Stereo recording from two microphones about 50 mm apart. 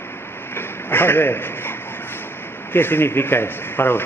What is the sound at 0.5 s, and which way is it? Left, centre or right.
A man's voice, left.